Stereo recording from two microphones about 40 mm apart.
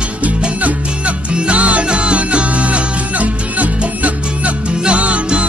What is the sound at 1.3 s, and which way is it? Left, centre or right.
Music, right.